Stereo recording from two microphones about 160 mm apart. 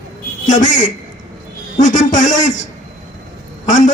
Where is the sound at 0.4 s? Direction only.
55° left (ahead or behind).